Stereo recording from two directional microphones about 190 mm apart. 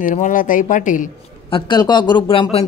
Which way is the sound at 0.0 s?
45° left (ahead or behind).